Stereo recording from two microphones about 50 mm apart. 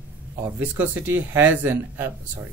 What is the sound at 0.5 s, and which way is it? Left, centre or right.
Speech, right.